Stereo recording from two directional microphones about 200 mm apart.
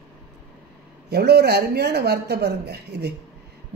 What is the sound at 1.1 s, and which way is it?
A woman's voice, 55° right (ahead or behind).